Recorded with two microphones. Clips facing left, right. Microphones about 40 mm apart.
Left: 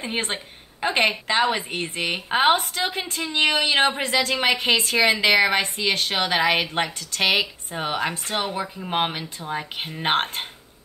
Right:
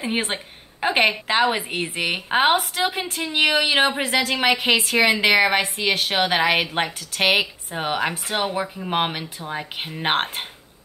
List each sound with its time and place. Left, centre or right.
0.0 s a woman's voice: centre
7.2 s speech: centre